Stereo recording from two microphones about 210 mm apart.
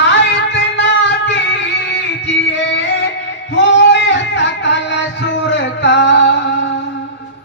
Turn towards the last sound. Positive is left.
turn(degrees=55)  # may be behind; listen again after turning